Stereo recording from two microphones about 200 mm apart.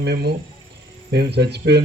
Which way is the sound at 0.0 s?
55° right (ahead or behind).